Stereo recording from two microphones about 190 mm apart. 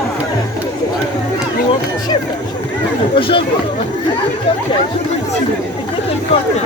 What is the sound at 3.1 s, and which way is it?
Chatter, 25° left (ahead or behind).